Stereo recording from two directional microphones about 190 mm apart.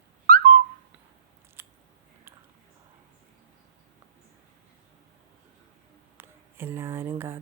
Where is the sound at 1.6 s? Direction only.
10° right (ahead or behind).